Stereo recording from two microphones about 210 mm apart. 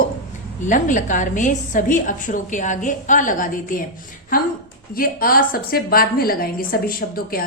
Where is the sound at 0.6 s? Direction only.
35° left (ahead or behind).